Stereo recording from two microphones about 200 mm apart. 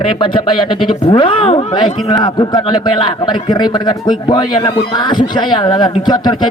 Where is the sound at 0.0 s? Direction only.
25° left (ahead or behind).